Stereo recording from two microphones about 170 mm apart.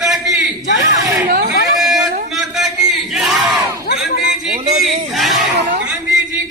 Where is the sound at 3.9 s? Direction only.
65° left (ahead or behind).